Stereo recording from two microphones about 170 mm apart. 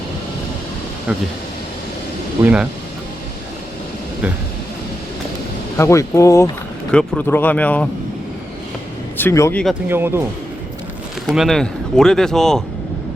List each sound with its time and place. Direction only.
2.4 s speech: 5° right (ahead or behind)
5.7 s speech: 15° left (ahead or behind)
9.1 s a man's voice: 15° left (ahead or behind)
9.9 s speech: 15° right (ahead or behind)
11.3 s speech: centre (ahead or behind)